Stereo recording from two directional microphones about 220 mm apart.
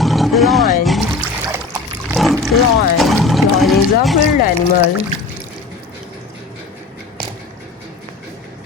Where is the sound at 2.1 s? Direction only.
Centre (ahead or behind).